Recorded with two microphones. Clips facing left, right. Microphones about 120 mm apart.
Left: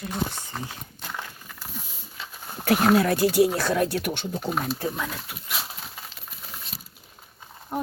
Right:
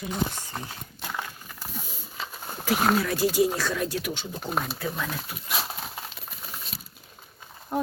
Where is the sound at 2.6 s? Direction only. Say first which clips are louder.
Left 4 dB; 55° left (ahead or behind).